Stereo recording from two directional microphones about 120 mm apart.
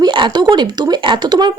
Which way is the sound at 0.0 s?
40° right (ahead or behind).